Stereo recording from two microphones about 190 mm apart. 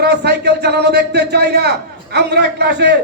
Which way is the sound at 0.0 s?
60° right (ahead or behind).